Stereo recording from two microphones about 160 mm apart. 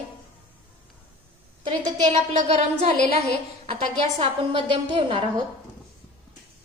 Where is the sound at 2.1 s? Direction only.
45° right (ahead or behind).